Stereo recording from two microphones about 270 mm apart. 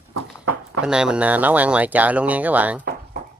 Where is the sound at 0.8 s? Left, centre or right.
Centre.